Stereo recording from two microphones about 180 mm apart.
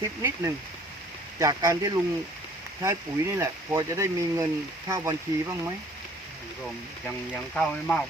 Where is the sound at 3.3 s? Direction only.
15° right (ahead or behind).